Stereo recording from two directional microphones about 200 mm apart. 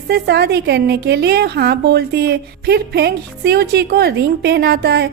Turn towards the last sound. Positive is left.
turn(degrees=-55)  # may be behind; listen again after turning